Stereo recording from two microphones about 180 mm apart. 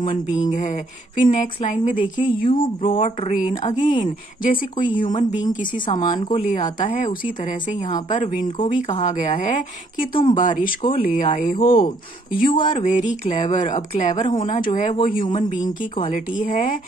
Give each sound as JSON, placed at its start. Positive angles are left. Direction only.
{"t": 0.3, "sound": "speech", "side_deg": 45}
{"t": 5.9, "sound": "speech", "side_deg": 25}
{"t": 6.4, "sound": "speech", "side_deg": 45}
{"t": 7.9, "sound": "speech", "side_deg": 25}
{"t": 8.6, "sound": "speech", "side_deg": 45}
{"t": 15.2, "sound": "speech", "side_deg": 25}
{"t": 16.1, "sound": "speech", "side_deg": 45}